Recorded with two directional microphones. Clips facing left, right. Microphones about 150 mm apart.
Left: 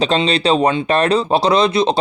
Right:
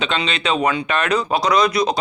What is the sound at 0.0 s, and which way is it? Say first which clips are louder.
Speech: left 7 dB; 35° left (ahead or behind).